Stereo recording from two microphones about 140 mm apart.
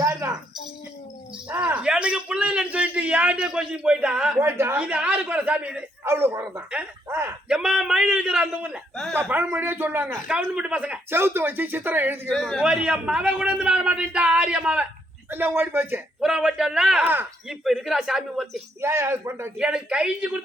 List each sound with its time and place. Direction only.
1.5 s a sound: 10° right (ahead or behind)
4.4 s a man's voice: 15° right (ahead or behind)
7.4 s a man's voice: 5° right (ahead or behind)
9.3 s a man's voice: 15° right (ahead or behind)
12.3 s a man's voice: centre (ahead or behind); by 17.2 s 15° right (ahead or behind)
17.5 s a man's voice: centre (ahead or behind)
18.8 s speech: 20° right (ahead or behind)
19.5 s a man's voice: 5° right (ahead or behind)